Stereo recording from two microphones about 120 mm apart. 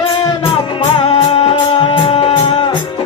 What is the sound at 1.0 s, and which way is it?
Music, 55° left (ahead or behind).